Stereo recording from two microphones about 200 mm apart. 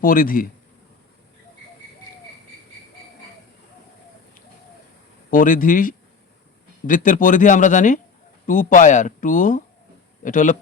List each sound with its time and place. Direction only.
0.0 s speech: 45° left (ahead or behind)
5.3 s speech: 40° left (ahead or behind)